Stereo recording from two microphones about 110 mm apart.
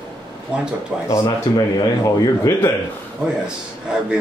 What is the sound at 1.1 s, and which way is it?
Speech, 35° left (ahead or behind).